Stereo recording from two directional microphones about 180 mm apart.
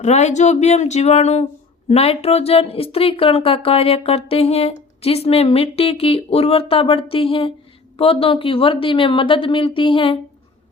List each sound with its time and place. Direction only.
0.0 s speech: 40° left (ahead or behind)